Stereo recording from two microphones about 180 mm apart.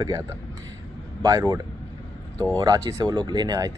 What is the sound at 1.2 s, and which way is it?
Speech, 20° right (ahead or behind).